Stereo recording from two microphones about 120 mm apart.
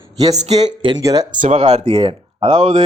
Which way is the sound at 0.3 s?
65° right (ahead or behind).